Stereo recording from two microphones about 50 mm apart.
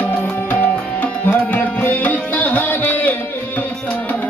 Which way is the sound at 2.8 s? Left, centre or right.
Left.